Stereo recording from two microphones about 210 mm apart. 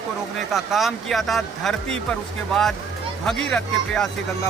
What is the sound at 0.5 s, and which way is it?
Speech, centre (ahead or behind).